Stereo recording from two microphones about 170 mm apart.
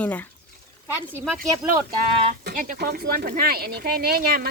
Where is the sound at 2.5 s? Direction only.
50° right (ahead or behind).